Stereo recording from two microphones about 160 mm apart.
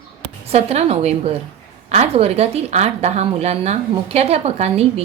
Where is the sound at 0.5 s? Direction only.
45° right (ahead or behind).